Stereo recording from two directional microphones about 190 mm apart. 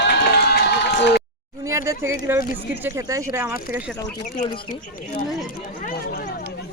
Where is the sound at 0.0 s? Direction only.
60° left (ahead or behind).